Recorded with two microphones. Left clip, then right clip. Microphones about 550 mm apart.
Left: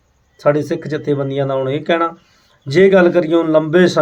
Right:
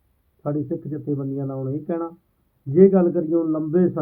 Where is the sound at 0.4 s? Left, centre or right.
Centre.